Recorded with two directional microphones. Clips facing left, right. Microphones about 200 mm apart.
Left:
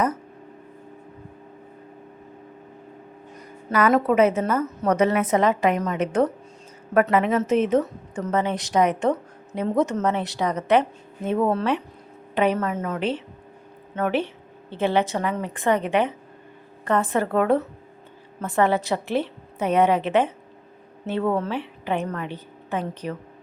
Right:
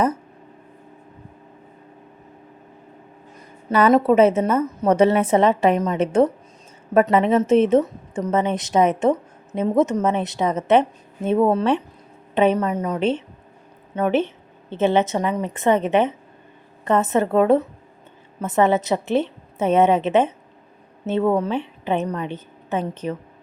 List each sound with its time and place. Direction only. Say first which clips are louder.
3.7 s a woman's voice: right 4 dB; 25° right (ahead or behind)